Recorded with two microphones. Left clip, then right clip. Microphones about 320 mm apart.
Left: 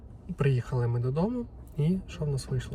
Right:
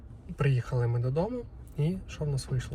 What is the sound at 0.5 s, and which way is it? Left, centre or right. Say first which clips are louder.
Speech: even; centre.